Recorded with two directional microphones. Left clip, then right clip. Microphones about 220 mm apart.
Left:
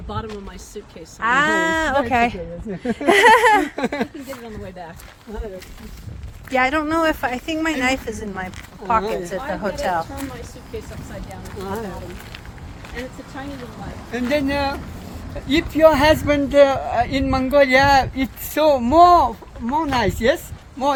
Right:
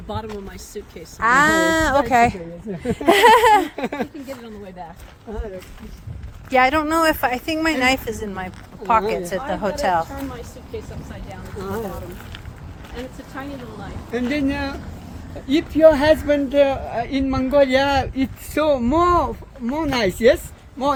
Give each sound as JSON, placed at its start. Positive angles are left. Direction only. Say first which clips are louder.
{"t": 1.2, "sound": "a woman's voice", "louder": "right 2 dB", "side_deg": -30}
{"t": 3.8, "sound": "speech", "louder": "left 2 dB", "side_deg": 25}
{"t": 6.5, "sound": "a woman's voice", "louder": "right 2 dB", "side_deg": -25}
{"t": 14.1, "sound": "speech", "louder": "left 2 dB", "side_deg": 30}
{"t": 18.5, "sound": "speech", "louder": "left 4 dB", "side_deg": 20}
{"t": 19.6, "sound": "speech", "louder": "left 1 dB", "side_deg": -5}